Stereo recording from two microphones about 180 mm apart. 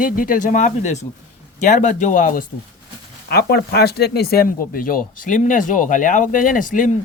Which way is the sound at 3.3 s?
60° left (ahead or behind).